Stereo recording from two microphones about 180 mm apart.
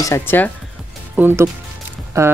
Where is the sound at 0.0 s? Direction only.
15° left (ahead or behind).